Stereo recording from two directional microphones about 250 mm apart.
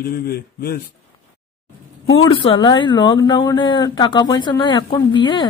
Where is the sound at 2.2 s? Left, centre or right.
Centre.